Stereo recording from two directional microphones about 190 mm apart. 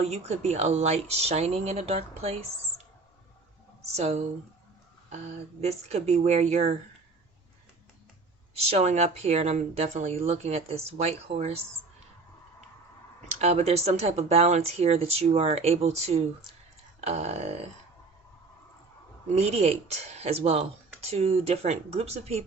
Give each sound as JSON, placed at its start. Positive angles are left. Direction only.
{"t": 0.0, "sound": "speech", "side_deg": -35}
{"t": 3.9, "sound": "speech", "side_deg": -35}
{"t": 5.5, "sound": "speech", "side_deg": -35}
{"t": 8.5, "sound": "speech", "side_deg": -35}
{"t": 13.4, "sound": "speech", "side_deg": -35}
{"t": 19.3, "sound": "speech", "side_deg": -35}